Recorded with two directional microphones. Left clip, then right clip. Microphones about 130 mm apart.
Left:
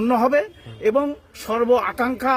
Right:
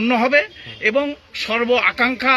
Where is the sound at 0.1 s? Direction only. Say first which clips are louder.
Right 2 dB; 35° left (ahead or behind).